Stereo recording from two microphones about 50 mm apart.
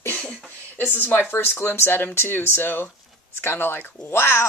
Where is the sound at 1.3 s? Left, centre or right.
Left.